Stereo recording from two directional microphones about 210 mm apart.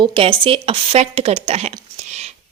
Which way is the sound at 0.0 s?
25° right (ahead or behind).